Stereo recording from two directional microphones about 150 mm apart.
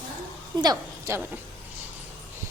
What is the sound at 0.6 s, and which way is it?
Speech, 20° right (ahead or behind).